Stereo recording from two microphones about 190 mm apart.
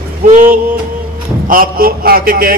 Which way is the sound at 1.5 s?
50° right (ahead or behind).